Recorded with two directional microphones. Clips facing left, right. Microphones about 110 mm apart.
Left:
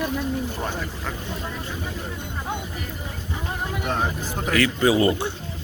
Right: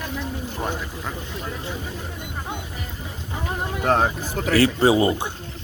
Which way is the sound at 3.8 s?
60° right (ahead or behind).